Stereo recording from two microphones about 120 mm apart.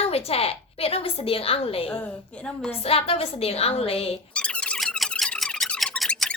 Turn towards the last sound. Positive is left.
turn(degrees=5)  # may be behind; listen again after turning